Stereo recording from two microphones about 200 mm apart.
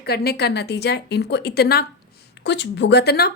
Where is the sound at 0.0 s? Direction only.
55° left (ahead or behind).